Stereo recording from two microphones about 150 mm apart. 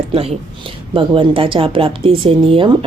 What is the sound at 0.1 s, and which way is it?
Speech, 40° right (ahead or behind).